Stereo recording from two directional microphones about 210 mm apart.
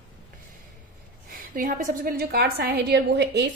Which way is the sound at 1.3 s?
40° right (ahead or behind).